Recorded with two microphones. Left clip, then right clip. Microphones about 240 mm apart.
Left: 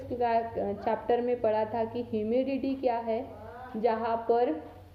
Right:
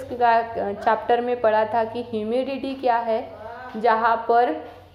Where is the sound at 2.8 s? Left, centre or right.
Centre.